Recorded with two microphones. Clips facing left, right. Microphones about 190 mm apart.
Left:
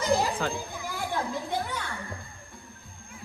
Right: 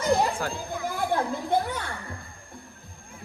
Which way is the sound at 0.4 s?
10° right (ahead or behind).